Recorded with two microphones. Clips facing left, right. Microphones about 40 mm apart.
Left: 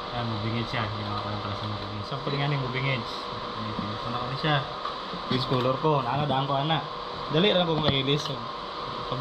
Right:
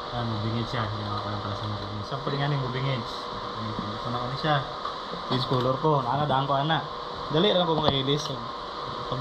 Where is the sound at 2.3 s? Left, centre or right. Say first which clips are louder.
Even; left.